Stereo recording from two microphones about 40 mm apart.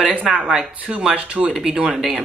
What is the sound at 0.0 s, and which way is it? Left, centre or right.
Speech, right.